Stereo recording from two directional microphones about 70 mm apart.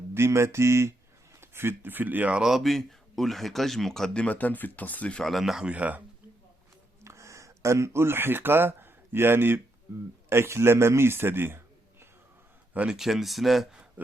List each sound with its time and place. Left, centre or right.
0.1 s mantra: right
1.4 s speech: right
2.3 s speech: centre
5.2 s speech: centre
5.6 s speech: centre
7.0 s a man's voice: right
12.7 s speech: centre
13.0 s speech: centre